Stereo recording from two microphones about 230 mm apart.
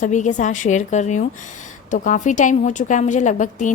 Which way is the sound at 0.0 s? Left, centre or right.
Left.